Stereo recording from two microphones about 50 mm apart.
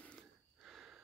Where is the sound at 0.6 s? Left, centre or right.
Centre.